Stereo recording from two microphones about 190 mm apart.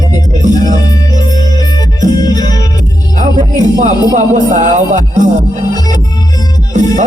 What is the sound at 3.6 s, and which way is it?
Music, 40° right (ahead or behind).